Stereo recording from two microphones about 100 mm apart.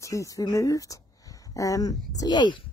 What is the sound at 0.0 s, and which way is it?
A woman's voice, 35° left (ahead or behind).